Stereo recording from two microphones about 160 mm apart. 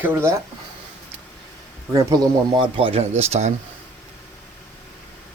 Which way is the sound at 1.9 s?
20° right (ahead or behind).